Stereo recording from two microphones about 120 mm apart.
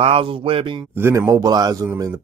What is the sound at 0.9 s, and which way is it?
Speech, 20° right (ahead or behind).